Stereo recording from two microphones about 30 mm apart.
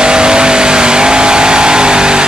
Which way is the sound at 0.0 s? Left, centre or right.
Right.